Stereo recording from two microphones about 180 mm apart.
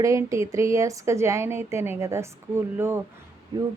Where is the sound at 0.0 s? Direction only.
20° right (ahead or behind).